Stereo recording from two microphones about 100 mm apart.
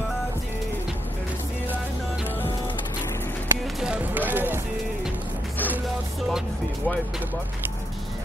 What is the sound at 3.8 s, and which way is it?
Speech, 10° right (ahead or behind).